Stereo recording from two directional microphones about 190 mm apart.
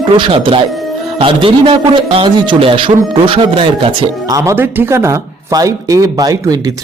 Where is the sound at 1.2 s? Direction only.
25° right (ahead or behind).